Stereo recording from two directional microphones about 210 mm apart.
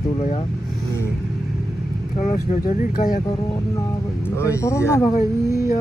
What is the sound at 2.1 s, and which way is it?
Speech, 35° left (ahead or behind).